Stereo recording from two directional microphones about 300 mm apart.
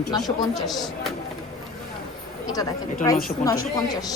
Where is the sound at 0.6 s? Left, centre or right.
Centre.